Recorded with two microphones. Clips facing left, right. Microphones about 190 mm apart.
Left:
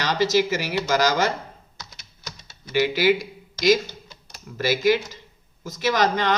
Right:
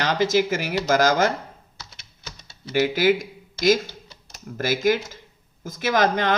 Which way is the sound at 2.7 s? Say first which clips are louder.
Even; 50° right (ahead or behind).